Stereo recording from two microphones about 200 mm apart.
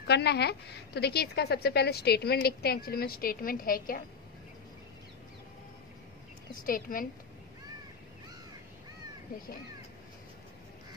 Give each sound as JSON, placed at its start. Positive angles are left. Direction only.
{"t": 0.0, "sound": "a woman's voice", "side_deg": 55}
{"t": 6.6, "sound": "a woman's voice", "side_deg": 45}